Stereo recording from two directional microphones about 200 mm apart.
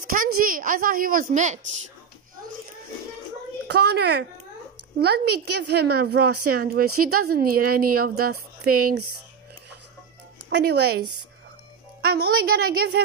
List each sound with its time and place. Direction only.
0.0 s a woman's voice: 45° right (ahead or behind)
3.6 s a woman's voice: 55° right (ahead or behind)
6.9 s a woman's voice: 90° right
7.3 s a woman's voice: 45° right (ahead or behind)
10.5 s a woman's voice: 55° right (ahead or behind)
12.0 s a woman's voice: 50° right (ahead or behind)